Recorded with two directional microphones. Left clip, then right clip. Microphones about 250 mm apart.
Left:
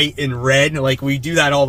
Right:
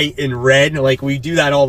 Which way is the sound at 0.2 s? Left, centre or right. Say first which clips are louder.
Right 3 dB; centre.